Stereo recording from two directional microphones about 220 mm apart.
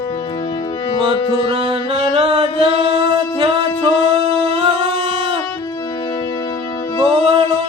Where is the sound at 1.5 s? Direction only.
25° right (ahead or behind).